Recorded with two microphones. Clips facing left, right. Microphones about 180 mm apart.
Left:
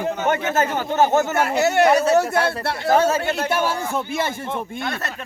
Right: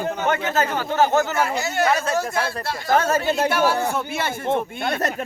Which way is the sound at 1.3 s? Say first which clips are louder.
Left 4 dB; 65° left (ahead or behind).